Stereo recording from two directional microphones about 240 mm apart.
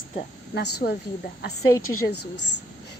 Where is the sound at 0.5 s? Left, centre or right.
Left.